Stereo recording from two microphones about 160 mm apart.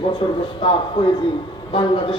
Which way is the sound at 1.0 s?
30° left (ahead or behind).